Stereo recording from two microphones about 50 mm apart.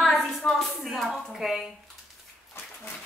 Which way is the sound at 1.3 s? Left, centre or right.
Centre.